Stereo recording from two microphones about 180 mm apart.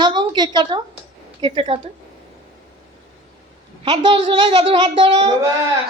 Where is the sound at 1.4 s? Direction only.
30° right (ahead or behind).